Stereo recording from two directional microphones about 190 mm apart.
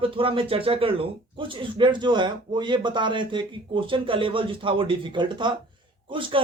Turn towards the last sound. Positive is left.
turn(degrees=-25)  # may be behind; listen again after turning